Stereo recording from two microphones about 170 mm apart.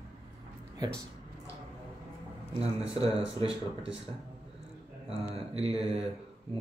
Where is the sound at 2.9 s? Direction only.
35° right (ahead or behind).